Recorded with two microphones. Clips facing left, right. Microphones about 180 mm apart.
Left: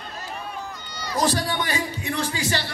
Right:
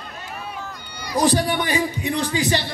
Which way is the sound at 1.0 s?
15° right (ahead or behind).